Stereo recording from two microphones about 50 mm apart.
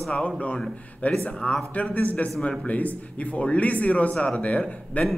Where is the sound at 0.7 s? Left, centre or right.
Left.